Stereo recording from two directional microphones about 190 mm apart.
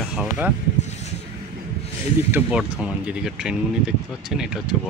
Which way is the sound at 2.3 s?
5° right (ahead or behind).